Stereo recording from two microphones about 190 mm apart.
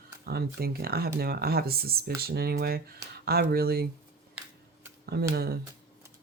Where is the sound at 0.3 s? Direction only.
55° right (ahead or behind).